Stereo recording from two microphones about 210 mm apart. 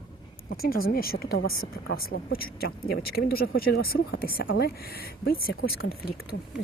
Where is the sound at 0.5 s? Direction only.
45° left (ahead or behind).